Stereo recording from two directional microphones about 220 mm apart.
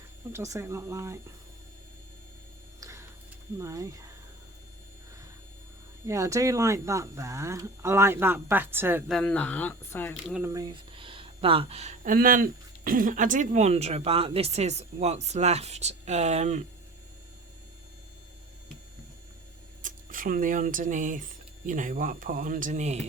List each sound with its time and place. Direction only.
0.3 s speech: 15° right (ahead or behind)
2.8 s hum: 10° right (ahead or behind)
3.6 s speech: 15° right (ahead or behind)
6.1 s speech: 15° right (ahead or behind)
9.1 s speech: 5° left (ahead or behind)
10.3 s speech: 15° right (ahead or behind); by 16.6 s 30° right (ahead or behind)
19.8 s speech: 40° right (ahead or behind)